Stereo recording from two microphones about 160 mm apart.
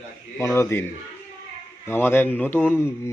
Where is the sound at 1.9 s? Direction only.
15° left (ahead or behind).